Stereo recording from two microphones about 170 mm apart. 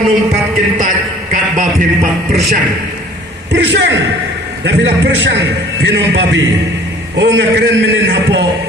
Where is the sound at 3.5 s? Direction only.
90° right.